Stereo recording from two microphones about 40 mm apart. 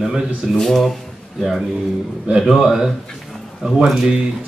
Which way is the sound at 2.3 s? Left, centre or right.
Centre.